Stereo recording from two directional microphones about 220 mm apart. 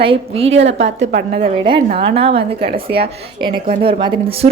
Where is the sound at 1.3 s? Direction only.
30° right (ahead or behind).